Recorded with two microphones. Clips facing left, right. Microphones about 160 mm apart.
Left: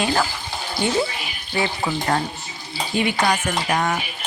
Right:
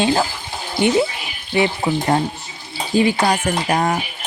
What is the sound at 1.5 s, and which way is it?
Speech, 20° right (ahead or behind).